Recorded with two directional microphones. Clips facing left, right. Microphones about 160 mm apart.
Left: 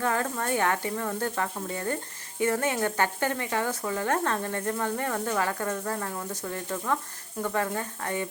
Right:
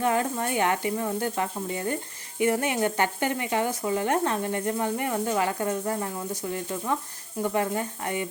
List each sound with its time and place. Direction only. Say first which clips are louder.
0.0 s speech: right 3 dB; 15° right (ahead or behind)